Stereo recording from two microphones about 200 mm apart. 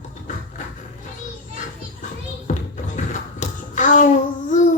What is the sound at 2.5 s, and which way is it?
Music, 40° left (ahead or behind).